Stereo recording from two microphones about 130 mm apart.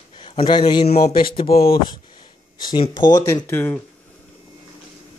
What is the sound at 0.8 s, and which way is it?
Speech, 55° left (ahead or behind).